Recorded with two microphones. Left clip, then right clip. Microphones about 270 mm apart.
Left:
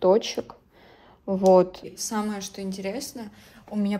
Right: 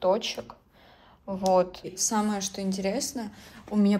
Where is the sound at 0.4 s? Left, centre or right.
Left.